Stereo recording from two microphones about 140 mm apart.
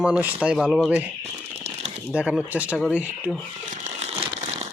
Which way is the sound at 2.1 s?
10° right (ahead or behind).